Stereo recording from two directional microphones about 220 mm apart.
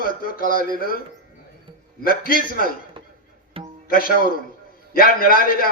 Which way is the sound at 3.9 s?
40° left (ahead or behind).